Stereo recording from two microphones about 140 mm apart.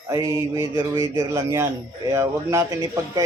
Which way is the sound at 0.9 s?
20° right (ahead or behind).